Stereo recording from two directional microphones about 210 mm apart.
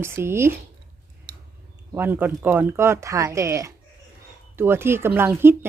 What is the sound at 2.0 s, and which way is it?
Speech, 10° right (ahead or behind).